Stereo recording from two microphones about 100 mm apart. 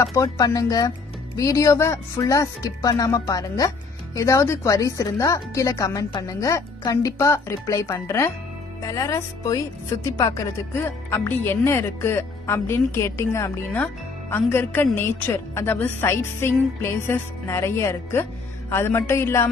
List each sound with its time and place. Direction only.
0.1 s speech: 35° left (ahead or behind)